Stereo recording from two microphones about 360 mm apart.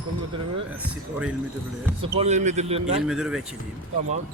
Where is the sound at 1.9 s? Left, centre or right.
Centre.